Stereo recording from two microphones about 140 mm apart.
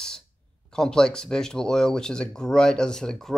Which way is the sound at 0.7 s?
5° left (ahead or behind).